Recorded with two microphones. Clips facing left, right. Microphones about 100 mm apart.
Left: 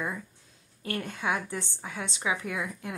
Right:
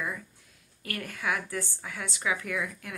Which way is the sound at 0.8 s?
25° left (ahead or behind).